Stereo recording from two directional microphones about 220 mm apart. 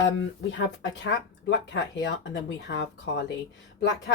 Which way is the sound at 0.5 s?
55° left (ahead or behind).